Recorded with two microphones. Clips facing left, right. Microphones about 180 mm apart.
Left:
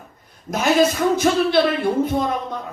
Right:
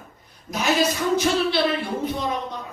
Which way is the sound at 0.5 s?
50° left (ahead or behind).